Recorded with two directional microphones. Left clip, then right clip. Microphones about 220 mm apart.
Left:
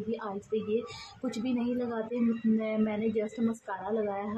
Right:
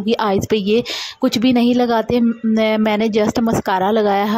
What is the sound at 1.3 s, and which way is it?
A woman's voice, 45° right (ahead or behind).